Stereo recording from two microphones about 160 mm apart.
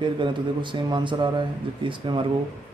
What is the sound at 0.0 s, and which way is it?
A man's voice, 30° right (ahead or behind).